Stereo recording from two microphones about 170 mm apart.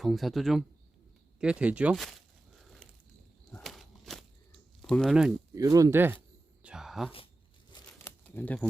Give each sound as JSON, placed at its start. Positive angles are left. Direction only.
{"t": 0.0, "sound": "speech", "side_deg": 0}
{"t": 2.6, "sound": "a sound", "side_deg": 5}
{"t": 5.5, "sound": "speech", "side_deg": -20}
{"t": 6.6, "sound": "whispering", "side_deg": -5}
{"t": 7.7, "sound": "crumpling", "side_deg": 15}